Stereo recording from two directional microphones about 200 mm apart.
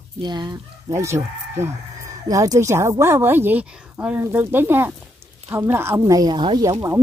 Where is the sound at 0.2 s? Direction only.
20° right (ahead or behind).